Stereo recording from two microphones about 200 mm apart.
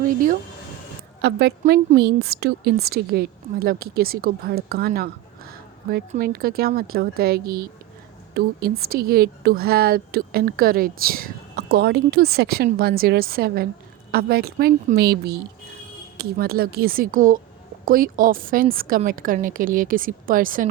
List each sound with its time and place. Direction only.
1.2 s a woman's voice: 55° right (ahead or behind)
6.1 s a woman's voice: 50° right (ahead or behind)